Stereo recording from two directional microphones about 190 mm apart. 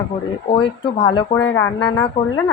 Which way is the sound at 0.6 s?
25° left (ahead or behind).